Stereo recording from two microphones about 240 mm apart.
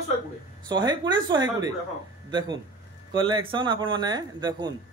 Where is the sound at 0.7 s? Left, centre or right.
Centre.